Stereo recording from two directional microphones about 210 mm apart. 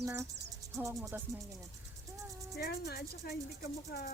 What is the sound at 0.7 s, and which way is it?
Music, 15° right (ahead or behind).